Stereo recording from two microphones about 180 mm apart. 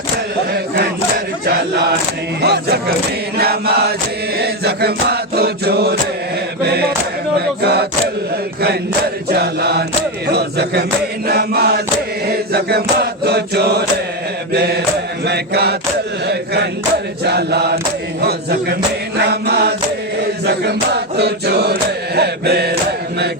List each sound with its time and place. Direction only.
2.4 s chant: 65° right (ahead or behind)
7.3 s a sound: 65° right (ahead or behind)
9.3 s chant: 65° right (ahead or behind)
15.2 s mantra: 65° right (ahead or behind)
16.2 s chant: 65° right (ahead or behind)
18.2 s a sound: 65° right (ahead or behind)
19.3 s chant: 65° right (ahead or behind)